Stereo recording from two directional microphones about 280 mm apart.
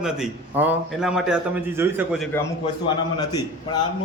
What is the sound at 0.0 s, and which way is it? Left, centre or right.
A man's voice, centre.